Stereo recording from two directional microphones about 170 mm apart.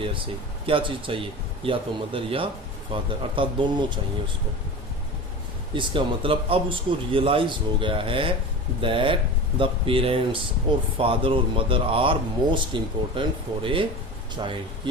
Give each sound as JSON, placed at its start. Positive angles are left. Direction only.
{"t": 0.6, "sound": "speech", "side_deg": -30}
{"t": 5.7, "sound": "speech", "side_deg": -30}